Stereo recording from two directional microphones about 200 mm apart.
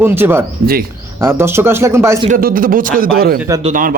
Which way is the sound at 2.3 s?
45° right (ahead or behind).